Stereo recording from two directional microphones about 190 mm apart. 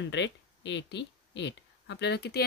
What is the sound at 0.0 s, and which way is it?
Speech, 70° left (ahead or behind).